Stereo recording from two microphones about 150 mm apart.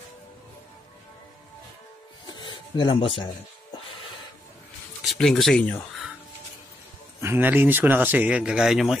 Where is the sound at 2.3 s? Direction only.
30° left (ahead or behind).